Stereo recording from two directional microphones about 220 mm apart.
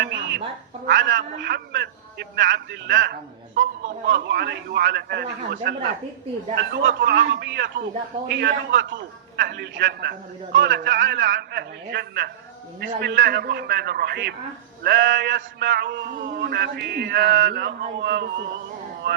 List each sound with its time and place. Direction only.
0.0 s frog: 50° right (ahead or behind)
0.9 s a man's voice: 55° right (ahead or behind)